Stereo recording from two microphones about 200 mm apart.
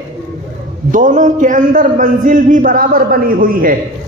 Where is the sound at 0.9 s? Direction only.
40° right (ahead or behind).